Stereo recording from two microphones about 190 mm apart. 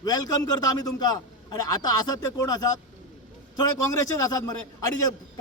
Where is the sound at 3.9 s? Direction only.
20° left (ahead or behind).